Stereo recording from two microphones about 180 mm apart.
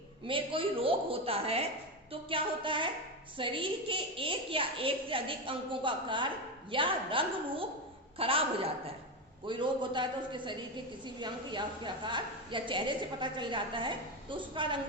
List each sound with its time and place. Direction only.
0.3 s a woman's voice: 30° right (ahead or behind)